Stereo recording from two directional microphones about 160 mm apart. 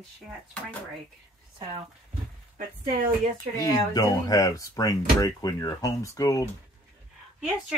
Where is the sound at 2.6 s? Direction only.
60° right (ahead or behind).